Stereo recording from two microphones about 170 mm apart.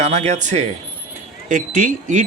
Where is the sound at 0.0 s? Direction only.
40° right (ahead or behind).